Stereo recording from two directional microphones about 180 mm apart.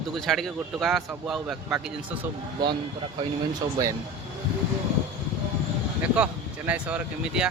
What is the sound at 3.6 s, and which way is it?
Speech, 20° right (ahead or behind).